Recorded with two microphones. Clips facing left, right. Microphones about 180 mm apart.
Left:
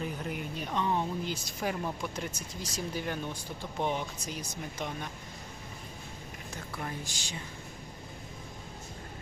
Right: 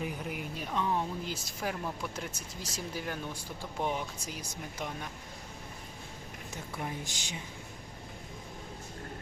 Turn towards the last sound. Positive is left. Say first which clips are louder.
# even
turn(degrees=-15)  # may be behind; listen again after turning